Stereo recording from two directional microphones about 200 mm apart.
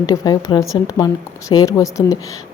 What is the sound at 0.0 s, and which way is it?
A woman's voice, 20° left (ahead or behind).